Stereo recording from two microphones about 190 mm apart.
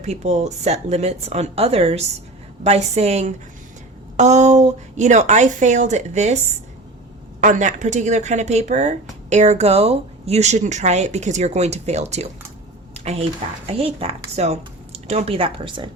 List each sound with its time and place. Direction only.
0.0 s speech: 35° right (ahead or behind)
7.4 s speech: 40° right (ahead or behind)
12.9 s a sound: 35° right (ahead or behind)
13.7 s speech: 30° right (ahead or behind)